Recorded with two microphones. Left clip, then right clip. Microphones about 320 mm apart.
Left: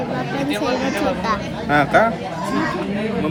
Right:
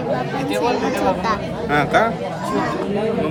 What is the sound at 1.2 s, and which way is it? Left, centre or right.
Speech, centre.